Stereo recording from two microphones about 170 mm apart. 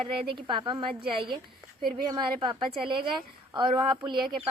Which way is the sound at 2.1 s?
25° right (ahead or behind).